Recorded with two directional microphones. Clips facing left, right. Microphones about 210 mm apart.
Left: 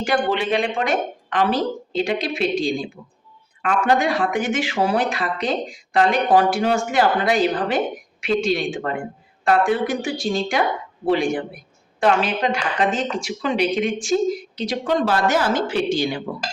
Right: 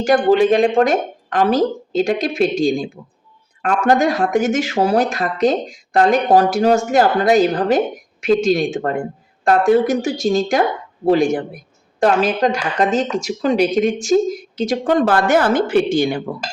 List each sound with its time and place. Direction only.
0.0 s speech: 45° right (ahead or behind)